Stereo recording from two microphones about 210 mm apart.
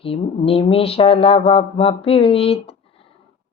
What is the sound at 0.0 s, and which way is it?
Speech, 25° left (ahead or behind).